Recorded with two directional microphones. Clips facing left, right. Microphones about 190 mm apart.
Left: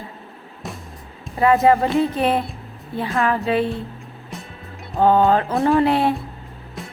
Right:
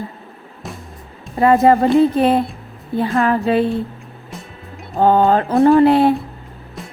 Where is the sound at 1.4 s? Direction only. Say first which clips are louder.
Right 3 dB; 35° right (ahead or behind).